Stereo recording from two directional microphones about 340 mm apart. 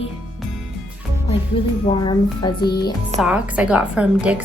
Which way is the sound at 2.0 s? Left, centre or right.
Centre.